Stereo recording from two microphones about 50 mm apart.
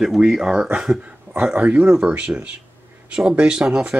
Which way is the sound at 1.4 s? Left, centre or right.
Right.